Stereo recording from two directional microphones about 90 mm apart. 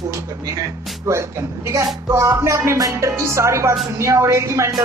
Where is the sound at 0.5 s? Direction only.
35° right (ahead or behind).